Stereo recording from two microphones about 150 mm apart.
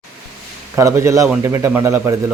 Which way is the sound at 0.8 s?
20° right (ahead or behind).